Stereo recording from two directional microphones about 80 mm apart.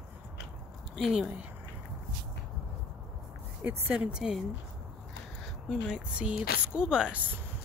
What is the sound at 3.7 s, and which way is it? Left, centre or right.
Speech, right.